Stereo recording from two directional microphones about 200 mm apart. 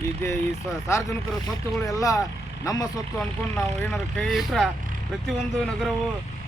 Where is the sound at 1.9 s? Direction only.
15° left (ahead or behind).